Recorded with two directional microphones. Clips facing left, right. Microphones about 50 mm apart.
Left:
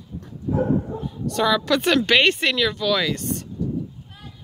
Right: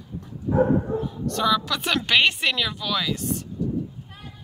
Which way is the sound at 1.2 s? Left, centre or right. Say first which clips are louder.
Left 3 dB; centre.